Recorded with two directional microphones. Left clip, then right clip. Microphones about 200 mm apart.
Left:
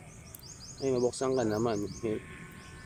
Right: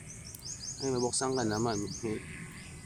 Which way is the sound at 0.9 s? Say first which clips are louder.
Left 3 dB; 35° right (ahead or behind).